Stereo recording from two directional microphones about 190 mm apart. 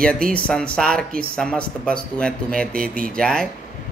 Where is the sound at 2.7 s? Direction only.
50° right (ahead or behind).